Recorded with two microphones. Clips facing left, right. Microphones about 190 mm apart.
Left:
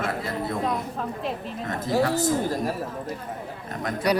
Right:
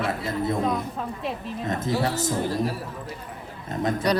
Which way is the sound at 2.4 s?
45° left (ahead or behind).